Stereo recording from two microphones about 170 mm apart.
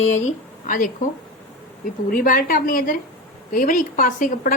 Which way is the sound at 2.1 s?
55° left (ahead or behind).